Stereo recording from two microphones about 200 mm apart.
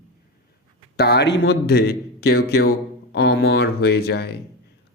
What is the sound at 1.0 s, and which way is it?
Speech, 55° left (ahead or behind).